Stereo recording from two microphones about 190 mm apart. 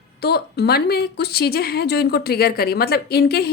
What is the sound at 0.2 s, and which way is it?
A woman's voice, 55° left (ahead or behind).